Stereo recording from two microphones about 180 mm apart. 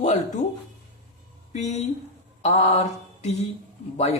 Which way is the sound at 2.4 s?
35° left (ahead or behind).